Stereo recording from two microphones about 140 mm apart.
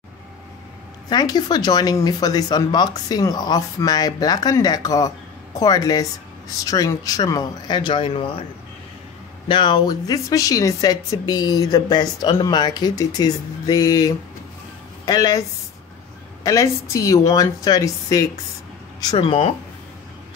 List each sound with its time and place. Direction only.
1.1 s speech: 30° left (ahead or behind)
9.5 s speech: 35° left (ahead or behind)
16.9 s speech: 25° left (ahead or behind)
19.1 s speech: 40° left (ahead or behind)